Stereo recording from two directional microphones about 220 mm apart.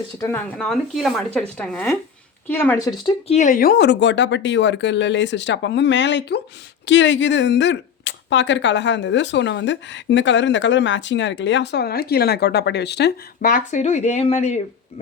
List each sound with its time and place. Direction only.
0.2 s speech: 10° left (ahead or behind)
3.3 s speech: 35° left (ahead or behind)